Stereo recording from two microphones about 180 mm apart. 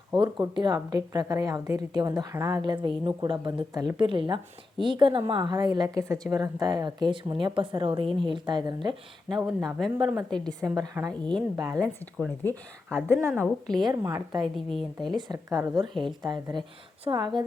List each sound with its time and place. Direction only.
0.2 s a woman's voice: 25° right (ahead or behind)
9.3 s speech: centre (ahead or behind)
10.6 s a woman's voice: 15° right (ahead or behind)
11.1 s speech: 5° left (ahead or behind)
11.5 s a woman's voice: 15° right (ahead or behind)
13.7 s a woman's voice: 20° right (ahead or behind)
14.5 s speech: centre (ahead or behind)
15.1 s a woman's voice: 20° right (ahead or behind)